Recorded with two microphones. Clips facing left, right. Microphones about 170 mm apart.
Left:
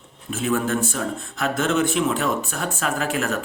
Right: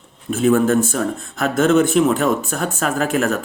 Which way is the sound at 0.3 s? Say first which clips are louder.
Right 8 dB; 45° right (ahead or behind).